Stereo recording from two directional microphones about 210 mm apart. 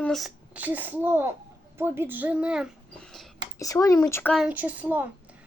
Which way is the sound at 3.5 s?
15° left (ahead or behind).